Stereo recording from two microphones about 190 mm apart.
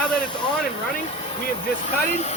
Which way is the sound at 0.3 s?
25° left (ahead or behind).